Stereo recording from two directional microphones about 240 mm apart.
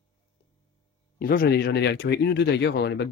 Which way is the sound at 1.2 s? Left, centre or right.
Left.